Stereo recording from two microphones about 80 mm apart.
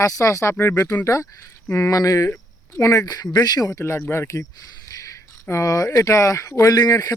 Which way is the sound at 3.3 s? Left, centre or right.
Left.